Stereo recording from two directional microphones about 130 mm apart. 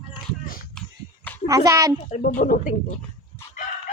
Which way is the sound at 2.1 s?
85° left.